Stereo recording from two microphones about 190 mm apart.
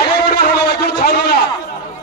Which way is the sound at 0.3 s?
55° left (ahead or behind).